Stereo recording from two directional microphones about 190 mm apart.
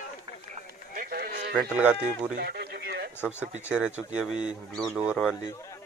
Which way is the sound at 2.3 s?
60° right (ahead or behind).